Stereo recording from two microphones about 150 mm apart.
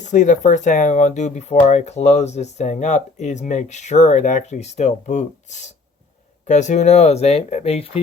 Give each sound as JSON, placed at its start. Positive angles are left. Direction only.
{"t": 0.0, "sound": "speech", "side_deg": 55}